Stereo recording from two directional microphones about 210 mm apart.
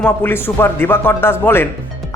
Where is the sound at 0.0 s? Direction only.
10° left (ahead or behind).